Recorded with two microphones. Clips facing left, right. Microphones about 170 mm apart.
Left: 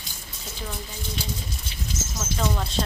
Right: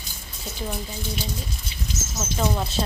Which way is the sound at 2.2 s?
15° right (ahead or behind).